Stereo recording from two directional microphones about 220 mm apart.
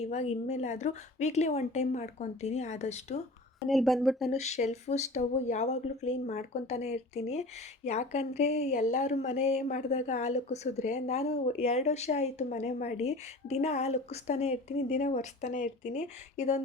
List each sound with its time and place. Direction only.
0.0 s speech: 30° left (ahead or behind)
3.7 s speech: centre (ahead or behind)
4.4 s speech: 30° left (ahead or behind)